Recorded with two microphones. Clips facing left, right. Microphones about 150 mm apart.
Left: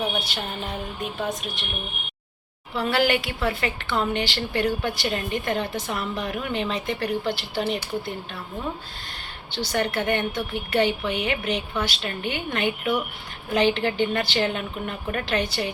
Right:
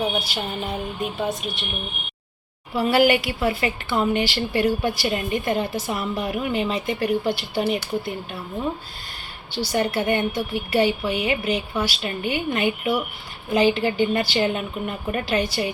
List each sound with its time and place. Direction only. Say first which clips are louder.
0.0 s a woman's voice: right 3 dB; 10° right (ahead or behind)
2.7 s a woman's voice: right 4 dB; 10° right (ahead or behind)
9.5 s a woman's voice: right 2 dB; 10° right (ahead or behind)